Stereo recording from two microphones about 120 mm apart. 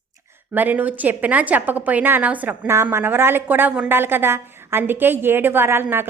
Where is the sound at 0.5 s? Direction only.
15° right (ahead or behind).